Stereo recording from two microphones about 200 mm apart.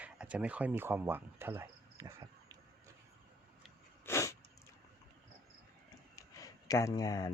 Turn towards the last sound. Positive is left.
turn(degrees=20)  # may be behind; listen again after turning